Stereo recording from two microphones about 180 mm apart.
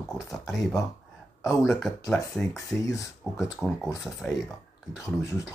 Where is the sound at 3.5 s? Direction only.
Centre (ahead or behind).